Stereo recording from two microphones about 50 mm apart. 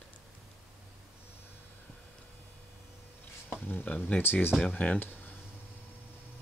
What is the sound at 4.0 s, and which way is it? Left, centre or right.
Speech, left.